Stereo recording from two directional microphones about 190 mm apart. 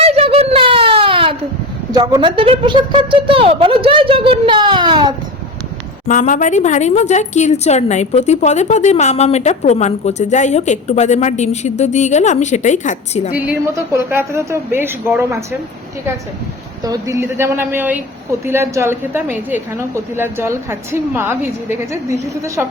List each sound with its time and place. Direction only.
0.0 s a sound: 30° right (ahead or behind)
1.9 s a woman's voice: 20° right (ahead or behind)
6.1 s speech: 45° left (ahead or behind)
13.3 s a woman's voice: 10° right (ahead or behind)
16.8 s a woman's voice: 15° right (ahead or behind)